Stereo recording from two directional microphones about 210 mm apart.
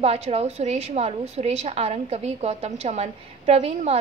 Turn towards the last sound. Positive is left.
turn(degrees=-30)  # may be behind; listen again after turning